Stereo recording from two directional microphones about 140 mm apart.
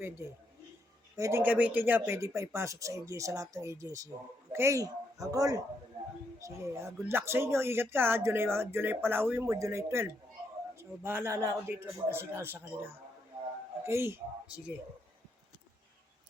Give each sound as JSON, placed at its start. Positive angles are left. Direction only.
{"t": 1.2, "sound": "speech", "side_deg": -15}